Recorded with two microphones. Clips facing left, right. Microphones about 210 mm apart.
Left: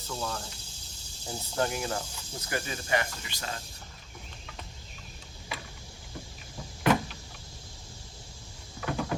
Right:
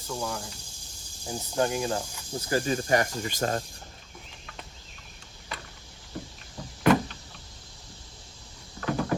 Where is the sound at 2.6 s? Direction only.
45° right (ahead or behind).